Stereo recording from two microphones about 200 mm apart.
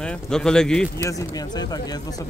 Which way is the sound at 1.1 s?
20° left (ahead or behind).